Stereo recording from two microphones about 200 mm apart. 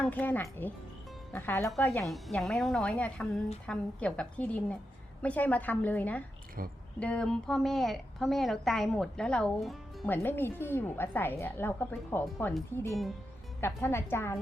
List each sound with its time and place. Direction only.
0.0 s a woman's voice: 10° left (ahead or behind)
1.9 s a woman's voice: centre (ahead or behind)
6.6 s speech: 45° right (ahead or behind)
7.0 s a woman's voice: 5° left (ahead or behind)
13.6 s a woman's voice: 10° left (ahead or behind)